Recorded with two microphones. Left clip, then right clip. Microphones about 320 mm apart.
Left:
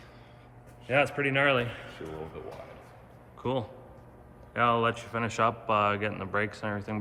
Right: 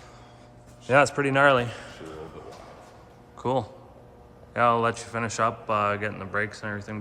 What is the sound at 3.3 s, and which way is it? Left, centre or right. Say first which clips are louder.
A man's voice: right 5 dB; centre.